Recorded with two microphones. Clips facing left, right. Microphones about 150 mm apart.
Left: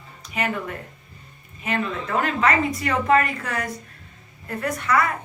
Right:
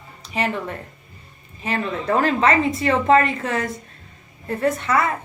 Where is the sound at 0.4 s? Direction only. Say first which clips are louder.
Right 3 dB; 30° right (ahead or behind).